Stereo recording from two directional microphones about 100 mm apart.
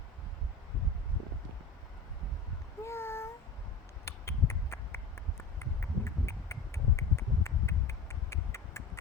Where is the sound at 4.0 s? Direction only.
30° left (ahead or behind).